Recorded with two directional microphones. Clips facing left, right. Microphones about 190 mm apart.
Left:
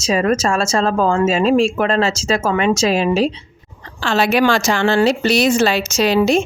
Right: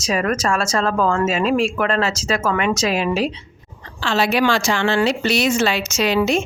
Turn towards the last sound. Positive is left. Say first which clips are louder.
# left 4 dB
turn(degrees=35)  # may be behind; listen again after turning